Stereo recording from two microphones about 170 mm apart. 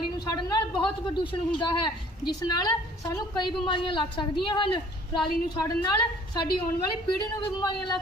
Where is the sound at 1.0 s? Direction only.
30° left (ahead or behind).